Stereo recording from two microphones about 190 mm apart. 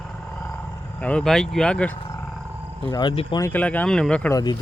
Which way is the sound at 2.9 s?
25° left (ahead or behind).